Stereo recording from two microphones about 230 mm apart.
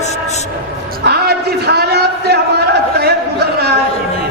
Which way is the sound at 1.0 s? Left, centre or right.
Right.